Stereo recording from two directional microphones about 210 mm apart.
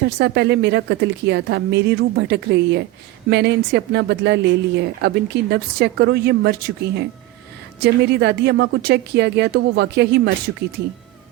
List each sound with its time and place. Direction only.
0.0 s speech: 55° right (ahead or behind)